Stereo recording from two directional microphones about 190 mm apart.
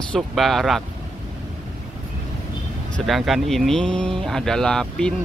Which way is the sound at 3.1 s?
Centre (ahead or behind).